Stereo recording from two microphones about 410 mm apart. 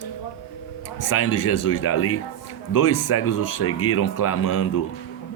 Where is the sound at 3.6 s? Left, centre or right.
Left.